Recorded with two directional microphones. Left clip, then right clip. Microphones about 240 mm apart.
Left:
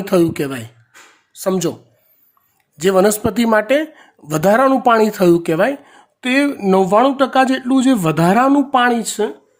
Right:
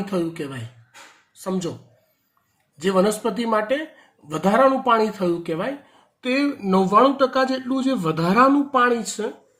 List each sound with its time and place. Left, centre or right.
0.0 s speech: left
2.7 s speech: left